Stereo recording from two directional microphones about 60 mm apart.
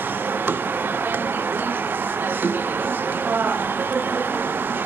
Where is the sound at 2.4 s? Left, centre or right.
Right.